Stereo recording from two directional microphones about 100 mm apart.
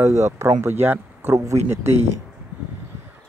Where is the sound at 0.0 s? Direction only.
30° right (ahead or behind).